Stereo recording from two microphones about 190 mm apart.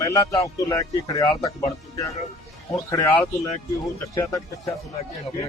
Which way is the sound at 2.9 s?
15° left (ahead or behind).